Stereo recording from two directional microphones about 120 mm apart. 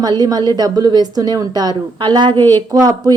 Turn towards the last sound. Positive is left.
turn(degrees=-30)  # may be behind; listen again after turning